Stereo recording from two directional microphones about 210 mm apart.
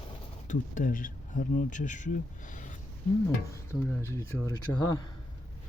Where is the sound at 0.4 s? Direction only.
40° left (ahead or behind).